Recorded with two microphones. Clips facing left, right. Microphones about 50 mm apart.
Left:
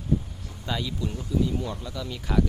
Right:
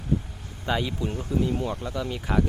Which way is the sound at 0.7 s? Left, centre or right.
Right.